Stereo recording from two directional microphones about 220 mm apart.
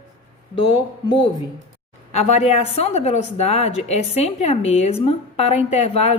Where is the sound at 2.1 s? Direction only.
30° left (ahead or behind).